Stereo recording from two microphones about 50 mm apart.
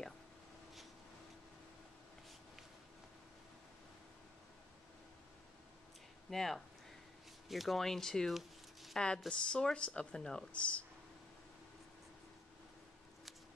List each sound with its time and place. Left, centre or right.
6.3 s speech: centre
8.3 s zipper: centre
8.9 s a woman's voice: centre